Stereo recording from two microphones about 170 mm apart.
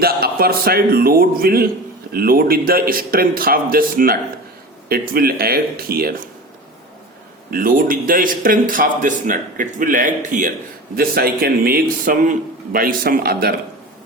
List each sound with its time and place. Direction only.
0.0 s a man's voice: 65° right (ahead or behind)
7.5 s a man's voice: 55° right (ahead or behind)
10.9 s a man's voice: 60° right (ahead or behind)